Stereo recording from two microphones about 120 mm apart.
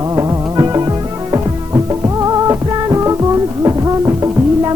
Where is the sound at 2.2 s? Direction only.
30° right (ahead or behind).